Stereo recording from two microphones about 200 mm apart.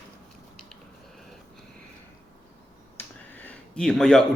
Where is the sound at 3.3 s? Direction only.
5° left (ahead or behind).